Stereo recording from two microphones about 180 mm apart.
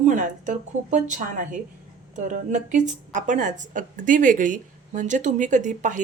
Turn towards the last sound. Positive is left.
turn(degrees=-45)  # may be behind; listen again after turning